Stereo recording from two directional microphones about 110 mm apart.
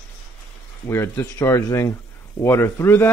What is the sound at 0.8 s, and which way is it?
Speech, 25° left (ahead or behind).